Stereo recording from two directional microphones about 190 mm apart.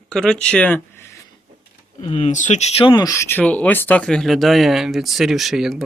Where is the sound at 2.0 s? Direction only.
25° left (ahead or behind).